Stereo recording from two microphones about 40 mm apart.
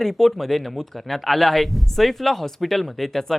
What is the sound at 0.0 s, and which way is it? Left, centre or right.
Speech, centre.